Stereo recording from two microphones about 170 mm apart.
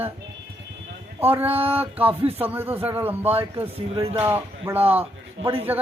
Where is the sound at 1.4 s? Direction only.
35° right (ahead or behind).